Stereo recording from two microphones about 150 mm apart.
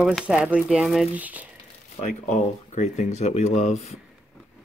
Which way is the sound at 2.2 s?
50° left (ahead or behind).